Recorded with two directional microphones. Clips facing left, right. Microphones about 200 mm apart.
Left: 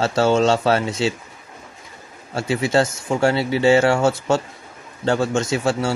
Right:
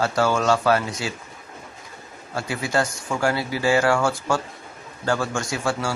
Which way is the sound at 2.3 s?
25° left (ahead or behind).